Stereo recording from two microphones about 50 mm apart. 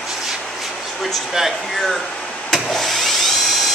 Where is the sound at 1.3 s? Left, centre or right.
Centre.